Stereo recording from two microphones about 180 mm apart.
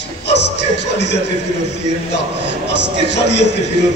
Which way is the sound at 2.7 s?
75° left (ahead or behind).